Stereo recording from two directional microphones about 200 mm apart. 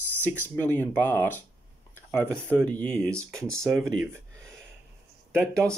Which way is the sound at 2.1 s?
15° right (ahead or behind).